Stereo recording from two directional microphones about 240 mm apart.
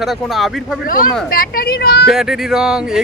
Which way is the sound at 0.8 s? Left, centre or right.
Left.